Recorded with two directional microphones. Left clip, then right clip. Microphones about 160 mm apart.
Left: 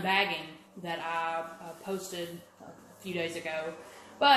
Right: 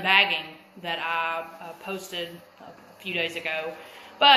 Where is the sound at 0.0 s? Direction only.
30° left (ahead or behind).